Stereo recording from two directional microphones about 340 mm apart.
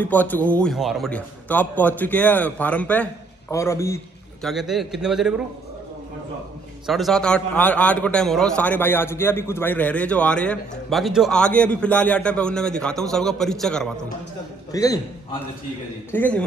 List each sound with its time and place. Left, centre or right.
0.0 s a man's voice: centre
6.9 s a man's voice: centre